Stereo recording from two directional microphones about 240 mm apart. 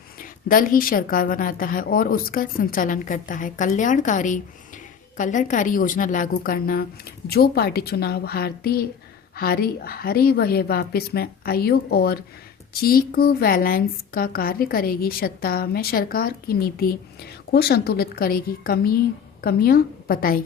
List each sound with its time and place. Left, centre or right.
0.2 s a woman's voice: left